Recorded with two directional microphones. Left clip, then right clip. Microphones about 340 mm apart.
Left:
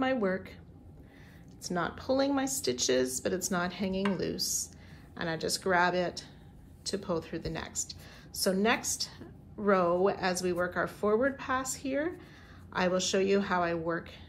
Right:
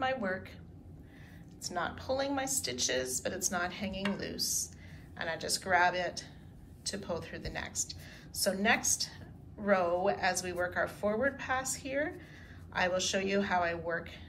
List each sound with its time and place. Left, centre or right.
0.0 s a woman's voice: centre
1.6 s a woman's voice: centre